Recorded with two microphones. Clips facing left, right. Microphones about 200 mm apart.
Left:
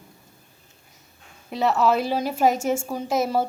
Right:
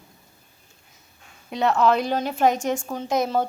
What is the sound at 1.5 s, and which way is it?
A woman's voice, centre (ahead or behind).